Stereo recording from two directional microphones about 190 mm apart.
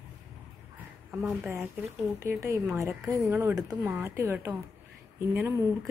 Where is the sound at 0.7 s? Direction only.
Centre (ahead or behind).